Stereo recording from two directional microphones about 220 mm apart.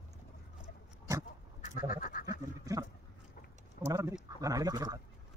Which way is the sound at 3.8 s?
15° right (ahead or behind).